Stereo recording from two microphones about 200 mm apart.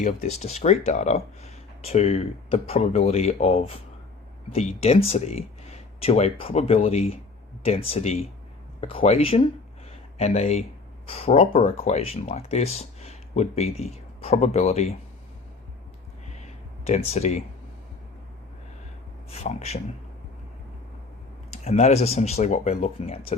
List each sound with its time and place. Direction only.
0.0 s speech: 35° left (ahead or behind)
16.3 s a sound: 35° left (ahead or behind)
19.3 s speech: 35° left (ahead or behind)
21.5 s speech: 35° left (ahead or behind)